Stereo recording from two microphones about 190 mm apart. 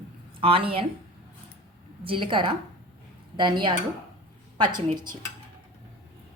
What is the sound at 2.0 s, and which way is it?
A woman's voice, 25° right (ahead or behind).